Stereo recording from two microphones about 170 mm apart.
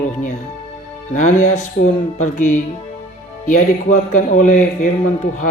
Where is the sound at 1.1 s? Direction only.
45° left (ahead or behind).